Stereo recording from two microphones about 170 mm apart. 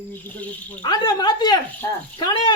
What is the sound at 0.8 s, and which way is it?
Speech, 25° left (ahead or behind).